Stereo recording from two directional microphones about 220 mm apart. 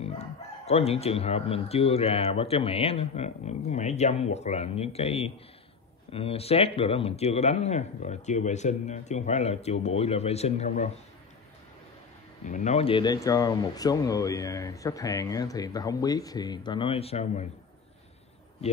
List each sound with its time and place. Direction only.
0.0 s speech: 30° left (ahead or behind)
12.4 s speech: 35° left (ahead or behind)